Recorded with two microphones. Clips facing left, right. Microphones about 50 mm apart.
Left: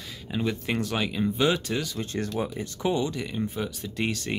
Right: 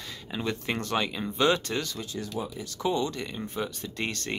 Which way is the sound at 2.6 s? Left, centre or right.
Left.